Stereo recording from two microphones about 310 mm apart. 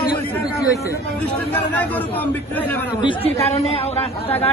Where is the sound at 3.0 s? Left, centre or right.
Centre.